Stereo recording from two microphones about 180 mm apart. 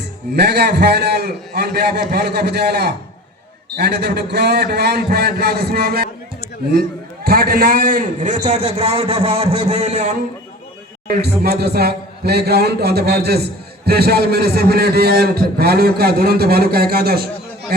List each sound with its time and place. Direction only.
0.3 s a man's voice: 65° right (ahead or behind)
7.3 s a man's voice: 55° right (ahead or behind); by 10.2 s 40° right (ahead or behind)
11.2 s a man's voice: 60° right (ahead or behind)